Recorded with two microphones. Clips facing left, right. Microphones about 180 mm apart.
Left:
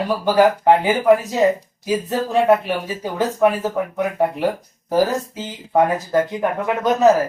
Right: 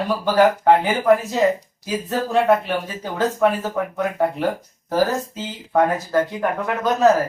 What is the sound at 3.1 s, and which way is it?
Speech, 15° left (ahead or behind).